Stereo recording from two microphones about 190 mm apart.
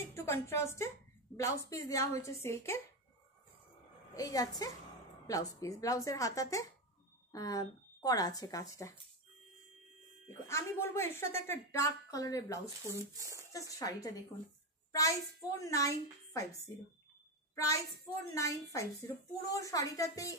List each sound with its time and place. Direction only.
0.1 s a woman's voice: 15° left (ahead or behind)
4.1 s a woman's voice: 20° left (ahead or behind)
10.2 s a woman's voice: 15° left (ahead or behind)
12.9 s speech: 15° right (ahead or behind)
13.5 s a woman's voice: 15° left (ahead or behind)
17.6 s a woman's voice: 15° left (ahead or behind)